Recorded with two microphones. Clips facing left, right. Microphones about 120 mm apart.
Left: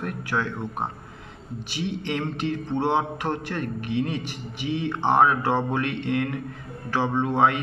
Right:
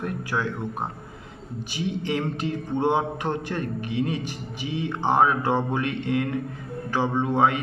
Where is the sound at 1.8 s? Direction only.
10° right (ahead or behind).